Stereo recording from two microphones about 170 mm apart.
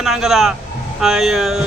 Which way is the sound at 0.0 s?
Centre (ahead or behind).